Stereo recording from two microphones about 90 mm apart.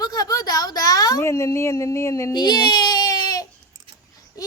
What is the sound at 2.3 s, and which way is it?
Speech, 50° left (ahead or behind).